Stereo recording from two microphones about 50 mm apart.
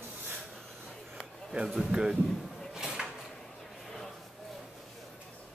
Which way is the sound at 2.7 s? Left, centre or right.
Centre.